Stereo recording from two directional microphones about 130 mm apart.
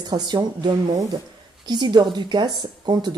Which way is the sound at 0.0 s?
35° right (ahead or behind).